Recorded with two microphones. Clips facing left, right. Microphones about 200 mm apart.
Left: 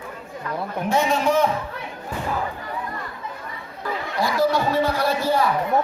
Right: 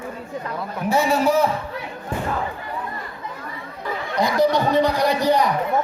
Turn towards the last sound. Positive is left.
turn(degrees=-15)  # may be behind; listen again after turning